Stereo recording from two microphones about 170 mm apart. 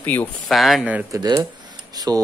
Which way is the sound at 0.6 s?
Centre (ahead or behind).